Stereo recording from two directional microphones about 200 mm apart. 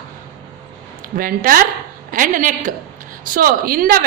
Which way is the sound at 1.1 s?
45° right (ahead or behind).